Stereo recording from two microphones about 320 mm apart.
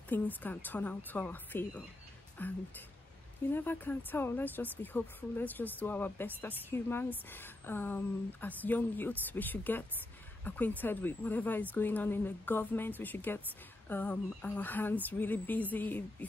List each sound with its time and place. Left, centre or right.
0.1 s speech: centre